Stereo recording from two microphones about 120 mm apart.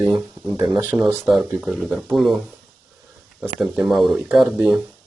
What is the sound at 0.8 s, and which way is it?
Speech, 15° right (ahead or behind).